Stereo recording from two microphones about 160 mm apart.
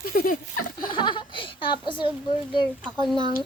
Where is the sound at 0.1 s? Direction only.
65° left (ahead or behind).